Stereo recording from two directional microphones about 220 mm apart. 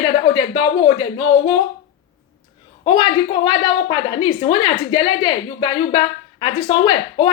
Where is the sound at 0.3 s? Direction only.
20° left (ahead or behind).